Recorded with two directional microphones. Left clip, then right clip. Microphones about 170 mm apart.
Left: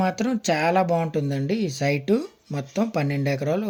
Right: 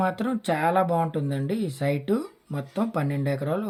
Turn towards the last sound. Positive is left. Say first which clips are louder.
# left 3 dB
turn(degrees=10)  # may be behind; listen again after turning